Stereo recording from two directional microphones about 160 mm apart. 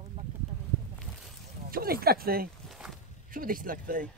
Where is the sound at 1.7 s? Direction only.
70° right (ahead or behind).